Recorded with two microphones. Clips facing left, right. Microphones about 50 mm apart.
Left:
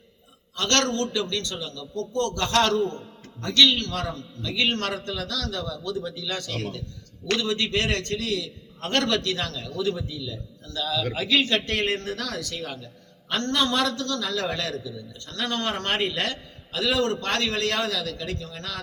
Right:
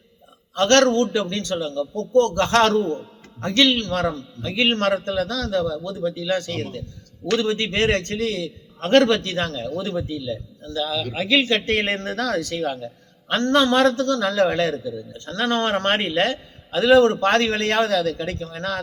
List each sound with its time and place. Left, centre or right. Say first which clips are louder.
0.5 s a man's voice: right 8 dB; right
2.8 s a man's voice: right 3 dB; centre
3.4 s a man's voice: right 2 dB; right; by 11.5 s centre
11.5 s a man's voice: right 3 dB; right